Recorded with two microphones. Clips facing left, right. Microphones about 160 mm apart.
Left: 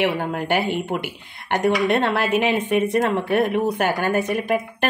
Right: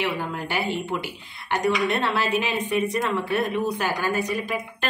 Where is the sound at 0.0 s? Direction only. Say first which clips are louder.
Left 5 dB; 55° left (ahead or behind).